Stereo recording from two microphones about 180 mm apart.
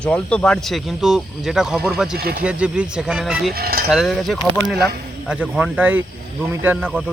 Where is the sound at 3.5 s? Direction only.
55° right (ahead or behind).